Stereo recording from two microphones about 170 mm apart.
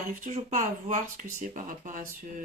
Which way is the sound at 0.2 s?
50° right (ahead or behind).